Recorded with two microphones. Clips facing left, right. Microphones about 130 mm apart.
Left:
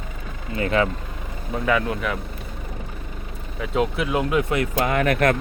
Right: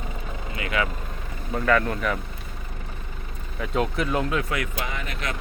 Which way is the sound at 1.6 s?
10° left (ahead or behind).